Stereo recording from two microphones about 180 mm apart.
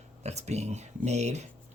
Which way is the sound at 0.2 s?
40° right (ahead or behind).